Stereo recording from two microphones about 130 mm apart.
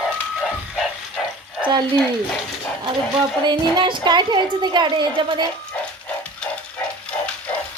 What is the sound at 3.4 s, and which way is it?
A woman's voice, 35° right (ahead or behind).